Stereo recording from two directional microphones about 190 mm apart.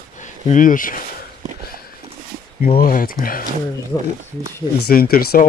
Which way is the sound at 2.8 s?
45° left (ahead or behind).